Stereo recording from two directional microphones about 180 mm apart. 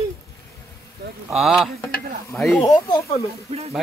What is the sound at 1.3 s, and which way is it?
Speech, centre (ahead or behind).